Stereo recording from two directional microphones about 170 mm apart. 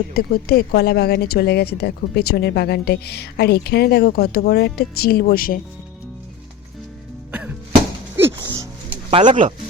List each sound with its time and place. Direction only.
0.1 s a woman's voice: 65° left (ahead or behind)
7.3 s music: 10° right (ahead or behind)
9.0 s speech: 40° right (ahead or behind)